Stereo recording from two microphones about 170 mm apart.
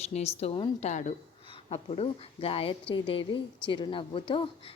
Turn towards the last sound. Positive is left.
turn(degrees=30)  # may be behind; listen again after turning